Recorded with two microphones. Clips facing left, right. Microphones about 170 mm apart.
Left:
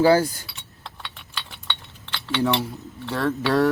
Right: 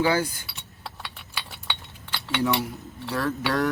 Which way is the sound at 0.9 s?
5° right (ahead or behind).